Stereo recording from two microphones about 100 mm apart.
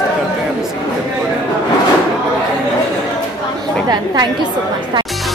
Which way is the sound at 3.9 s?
45° right (ahead or behind).